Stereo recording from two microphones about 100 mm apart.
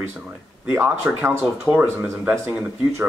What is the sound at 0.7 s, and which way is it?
Speech, 20° right (ahead or behind).